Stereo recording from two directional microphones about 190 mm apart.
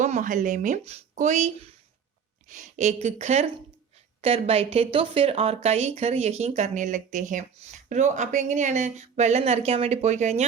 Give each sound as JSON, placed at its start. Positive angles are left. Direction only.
{"t": 0.0, "sound": "speech", "side_deg": -40}